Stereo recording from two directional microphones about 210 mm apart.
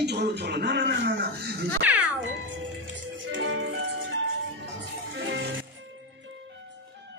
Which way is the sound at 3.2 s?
60° right (ahead or behind).